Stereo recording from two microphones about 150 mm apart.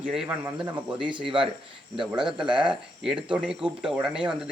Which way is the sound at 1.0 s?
35° right (ahead or behind).